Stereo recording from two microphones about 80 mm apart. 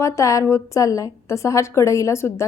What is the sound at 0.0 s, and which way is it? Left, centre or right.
A woman's voice, left.